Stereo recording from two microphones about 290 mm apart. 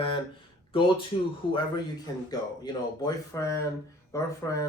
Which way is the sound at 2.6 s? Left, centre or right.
Centre.